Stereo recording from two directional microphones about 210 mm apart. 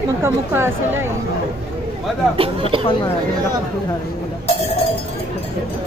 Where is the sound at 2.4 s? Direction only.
25° right (ahead or behind).